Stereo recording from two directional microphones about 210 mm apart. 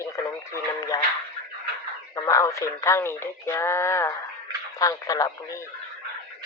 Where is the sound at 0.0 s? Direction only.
15° left (ahead or behind).